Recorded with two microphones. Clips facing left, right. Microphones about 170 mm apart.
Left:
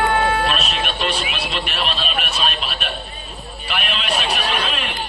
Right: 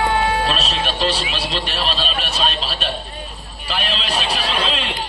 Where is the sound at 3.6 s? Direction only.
35° right (ahead or behind).